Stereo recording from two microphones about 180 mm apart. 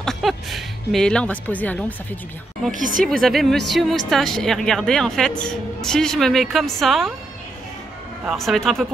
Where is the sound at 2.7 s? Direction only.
45° right (ahead or behind).